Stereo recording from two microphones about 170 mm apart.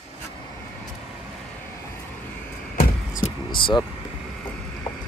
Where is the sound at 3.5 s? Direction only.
30° left (ahead or behind).